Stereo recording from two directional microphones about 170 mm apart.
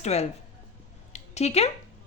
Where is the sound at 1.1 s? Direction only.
40° left (ahead or behind).